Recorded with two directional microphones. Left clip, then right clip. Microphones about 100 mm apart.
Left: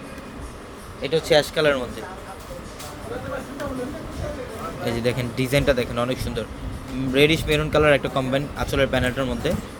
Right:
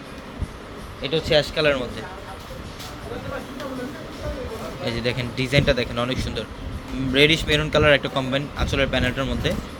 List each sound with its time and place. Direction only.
1.0 s speech: 55° left (ahead or behind); by 2.0 s 35° left (ahead or behind)
4.8 s a man's voice: 30° left (ahead or behind)